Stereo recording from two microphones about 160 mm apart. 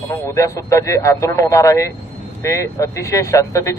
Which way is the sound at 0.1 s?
20° left (ahead or behind).